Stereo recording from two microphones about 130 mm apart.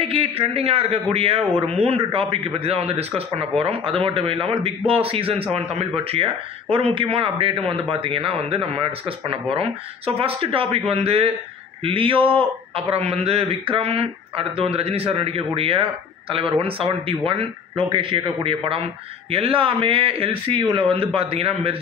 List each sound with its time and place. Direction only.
0.0 s a man's voice: 45° right (ahead or behind)